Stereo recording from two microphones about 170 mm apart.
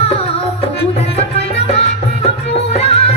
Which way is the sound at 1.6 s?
35° left (ahead or behind).